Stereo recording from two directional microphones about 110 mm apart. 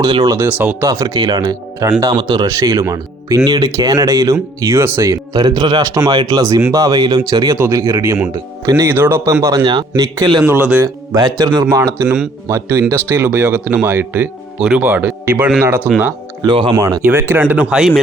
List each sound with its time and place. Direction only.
0.0 s speech: 35° right (ahead or behind); by 0.9 s 15° right (ahead or behind)
0.9 s speech: 35° right (ahead or behind)
9.0 s speech: 20° right (ahead or behind)
9.6 s speech: 40° right (ahead or behind)
10.4 s speech: 15° right (ahead or behind)
10.8 s speech: 35° right (ahead or behind)
16.4 s speech: 45° right (ahead or behind)
16.7 s speech: 30° right (ahead or behind)
17.0 s speech: 20° right (ahead or behind)
17.5 s speech: 10° right (ahead or behind)